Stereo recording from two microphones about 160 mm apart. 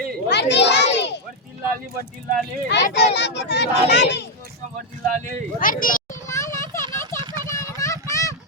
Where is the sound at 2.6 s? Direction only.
90° left.